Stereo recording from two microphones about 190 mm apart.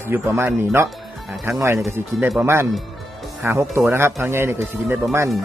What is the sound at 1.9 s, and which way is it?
Speech, 10° right (ahead or behind).